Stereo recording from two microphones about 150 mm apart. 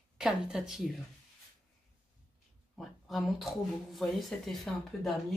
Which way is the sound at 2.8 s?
Centre (ahead or behind).